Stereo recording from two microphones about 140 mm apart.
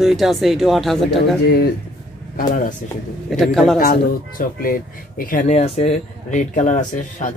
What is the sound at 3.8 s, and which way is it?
Speech, 85° left.